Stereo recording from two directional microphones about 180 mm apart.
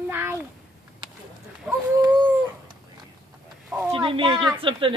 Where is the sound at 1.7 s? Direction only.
15° right (ahead or behind).